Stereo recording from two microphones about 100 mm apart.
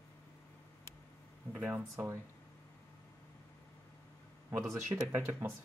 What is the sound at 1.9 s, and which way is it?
Speech, 25° right (ahead or behind).